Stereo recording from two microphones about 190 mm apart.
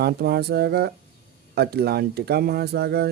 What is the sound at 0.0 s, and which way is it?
Speech, 60° right (ahead or behind).